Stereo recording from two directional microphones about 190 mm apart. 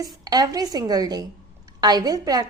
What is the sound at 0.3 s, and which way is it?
A woman's voice, 20° right (ahead or behind).